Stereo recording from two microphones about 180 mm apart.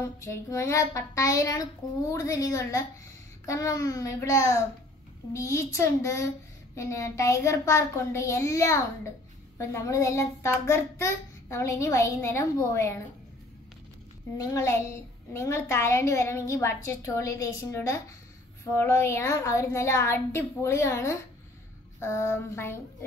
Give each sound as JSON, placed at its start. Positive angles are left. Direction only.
{"t": 0.0, "sound": "a child's voice", "side_deg": 15}
{"t": 14.3, "sound": "a child's voice", "side_deg": 15}